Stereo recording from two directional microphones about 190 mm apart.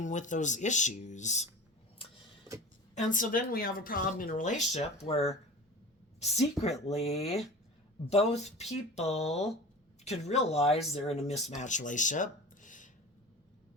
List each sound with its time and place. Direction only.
0.0 s speech: 40° left (ahead or behind)
2.9 s speech: 40° left (ahead or behind)
4.7 s speech: 35° left (ahead or behind)